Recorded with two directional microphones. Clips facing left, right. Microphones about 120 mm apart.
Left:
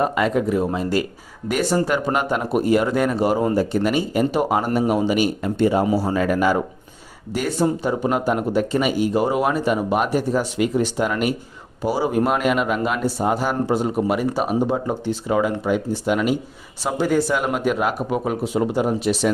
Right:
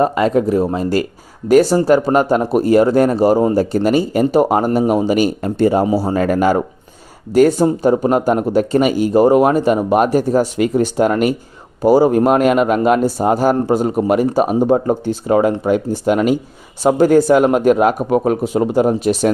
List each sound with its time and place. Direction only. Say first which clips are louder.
0.0 s speech: right 5 dB; 35° right (ahead or behind)
5.8 s a man's voice: right 4 dB; 30° right (ahead or behind)
6.1 s a man's voice: right 6 dB; 45° right (ahead or behind)